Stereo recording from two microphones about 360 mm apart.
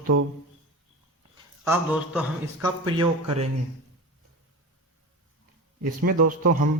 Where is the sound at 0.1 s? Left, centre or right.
Right.